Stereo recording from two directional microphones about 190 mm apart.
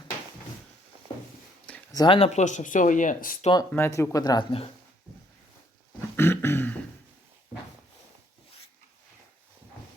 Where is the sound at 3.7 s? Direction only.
15° left (ahead or behind).